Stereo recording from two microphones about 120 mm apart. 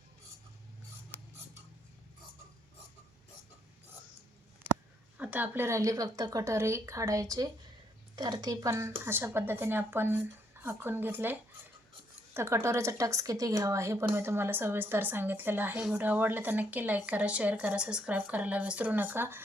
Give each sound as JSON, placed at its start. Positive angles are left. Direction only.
{"t": 5.1, "sound": "a woman's voice", "side_deg": -15}